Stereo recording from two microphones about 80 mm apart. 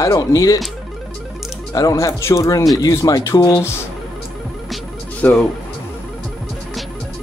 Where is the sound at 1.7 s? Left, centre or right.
Left.